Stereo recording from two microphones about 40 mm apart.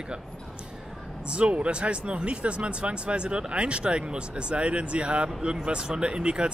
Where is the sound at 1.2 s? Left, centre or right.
Right.